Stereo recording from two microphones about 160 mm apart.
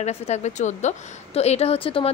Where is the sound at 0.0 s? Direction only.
45° left (ahead or behind).